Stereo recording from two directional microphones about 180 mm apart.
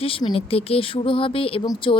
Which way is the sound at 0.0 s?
30° left (ahead or behind).